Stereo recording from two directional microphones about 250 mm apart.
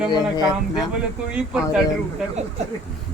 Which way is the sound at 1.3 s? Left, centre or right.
Centre.